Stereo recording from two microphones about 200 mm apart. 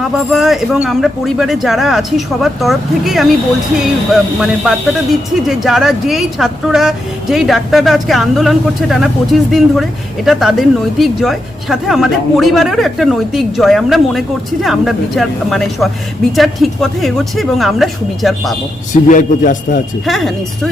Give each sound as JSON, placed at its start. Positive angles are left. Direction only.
{"t": 0.1, "sound": "speech", "side_deg": 0}
{"t": 19.0, "sound": "a man's voice", "side_deg": 40}
{"t": 20.1, "sound": "speech", "side_deg": 0}